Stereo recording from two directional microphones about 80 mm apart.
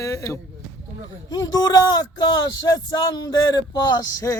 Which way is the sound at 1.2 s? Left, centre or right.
Left.